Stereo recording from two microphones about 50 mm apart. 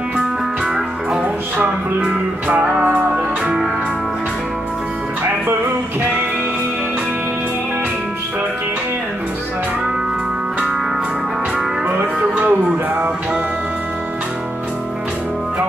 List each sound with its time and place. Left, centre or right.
1.2 s music: right
12.2 s music: right